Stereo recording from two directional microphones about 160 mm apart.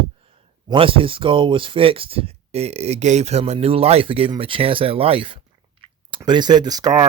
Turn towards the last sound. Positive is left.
turn(degrees=-25)  # may be behind; listen again after turning